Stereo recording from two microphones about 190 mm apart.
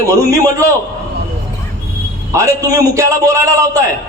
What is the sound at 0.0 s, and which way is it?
Speech, 15° right (ahead or behind).